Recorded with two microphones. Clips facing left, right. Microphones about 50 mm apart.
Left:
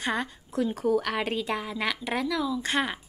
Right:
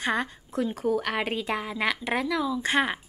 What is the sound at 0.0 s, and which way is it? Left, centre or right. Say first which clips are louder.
A woman's voice: right 2 dB; centre.